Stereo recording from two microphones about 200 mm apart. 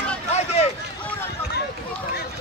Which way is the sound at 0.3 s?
35° left (ahead or behind).